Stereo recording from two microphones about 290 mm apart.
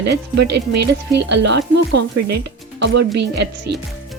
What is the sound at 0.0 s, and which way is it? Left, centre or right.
Speech, right.